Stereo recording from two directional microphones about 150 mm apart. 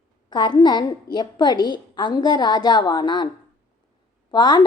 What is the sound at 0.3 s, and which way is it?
A woman's voice, 30° left (ahead or behind).